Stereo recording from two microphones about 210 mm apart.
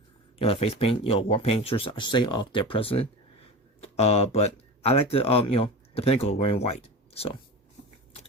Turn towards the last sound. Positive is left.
turn(degrees=30)  # may be behind; listen again after turning